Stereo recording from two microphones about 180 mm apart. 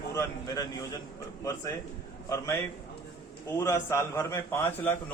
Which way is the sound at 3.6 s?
15° left (ahead or behind).